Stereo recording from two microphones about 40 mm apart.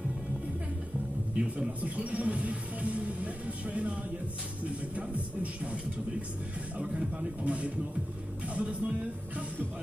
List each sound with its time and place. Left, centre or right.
1.3 s speech: right
6.8 s speech: right
7.2 s speech: right